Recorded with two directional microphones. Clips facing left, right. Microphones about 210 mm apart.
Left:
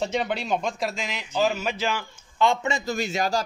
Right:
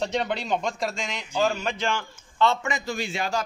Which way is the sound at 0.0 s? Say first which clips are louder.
Left 1 dB; 5° left (ahead or behind).